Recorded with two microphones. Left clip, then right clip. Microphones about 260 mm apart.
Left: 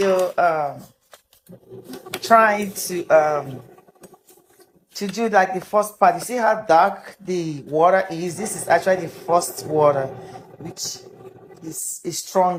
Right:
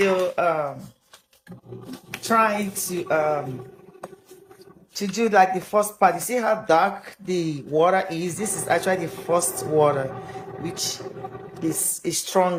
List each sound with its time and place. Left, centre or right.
0.0 s speech: centre
2.2 s a sound: centre
4.9 s speech: centre
10.8 s speech: centre
11.6 s speech: centre